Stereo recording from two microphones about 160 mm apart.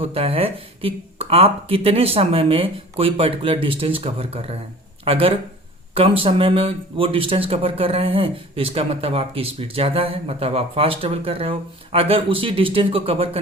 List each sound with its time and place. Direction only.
0.0 s speech: 35° right (ahead or behind)